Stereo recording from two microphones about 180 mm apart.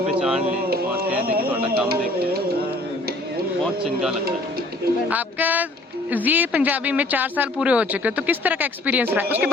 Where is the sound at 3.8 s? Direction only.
5° right (ahead or behind).